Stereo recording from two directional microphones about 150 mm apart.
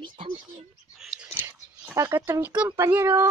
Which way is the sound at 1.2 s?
15° right (ahead or behind).